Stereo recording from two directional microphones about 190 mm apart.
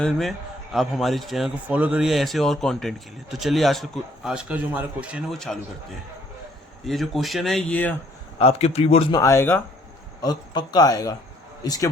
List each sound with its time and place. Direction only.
0.0 s a man's voice: centre (ahead or behind)
6.8 s a man's voice: centre (ahead or behind)
8.4 s speech: 30° left (ahead or behind)
9.2 s a man's voice: 15° left (ahead or behind)